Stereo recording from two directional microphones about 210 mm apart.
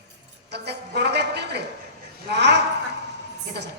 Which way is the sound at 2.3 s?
55° right (ahead or behind).